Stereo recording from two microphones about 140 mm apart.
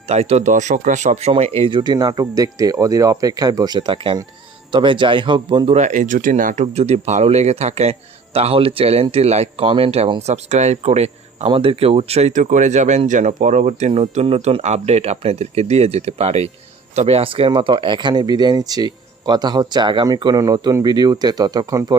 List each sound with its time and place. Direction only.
0.1 s speech: 50° right (ahead or behind)
5.7 s speech: 60° right (ahead or behind); by 21.9 s 25° right (ahead or behind)